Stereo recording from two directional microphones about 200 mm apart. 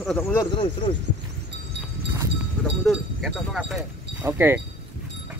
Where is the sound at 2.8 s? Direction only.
Centre (ahead or behind).